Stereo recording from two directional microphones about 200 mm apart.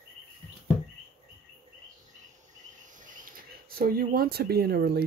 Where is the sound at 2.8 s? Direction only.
40° right (ahead or behind).